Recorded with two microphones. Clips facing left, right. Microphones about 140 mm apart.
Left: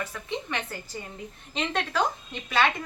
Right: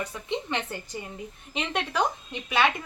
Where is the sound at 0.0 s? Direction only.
20° right (ahead or behind).